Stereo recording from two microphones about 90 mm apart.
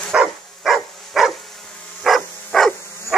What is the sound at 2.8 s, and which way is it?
Dog, 35° left (ahead or behind).